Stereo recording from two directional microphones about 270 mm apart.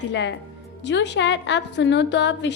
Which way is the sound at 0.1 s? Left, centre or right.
Left.